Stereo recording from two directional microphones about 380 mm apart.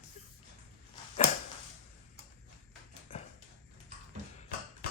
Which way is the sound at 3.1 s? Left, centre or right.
Centre.